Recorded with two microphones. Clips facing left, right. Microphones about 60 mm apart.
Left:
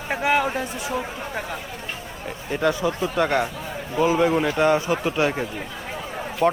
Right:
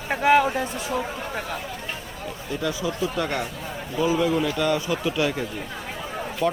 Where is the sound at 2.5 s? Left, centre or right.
Left.